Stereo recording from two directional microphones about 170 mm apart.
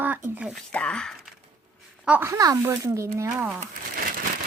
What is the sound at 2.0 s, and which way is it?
Speech, 10° right (ahead or behind).